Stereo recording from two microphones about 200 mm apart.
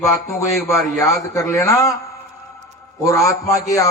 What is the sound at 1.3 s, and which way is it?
Speech, 15° left (ahead or behind).